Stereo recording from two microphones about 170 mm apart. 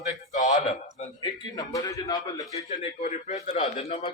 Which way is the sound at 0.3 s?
45° left (ahead or behind).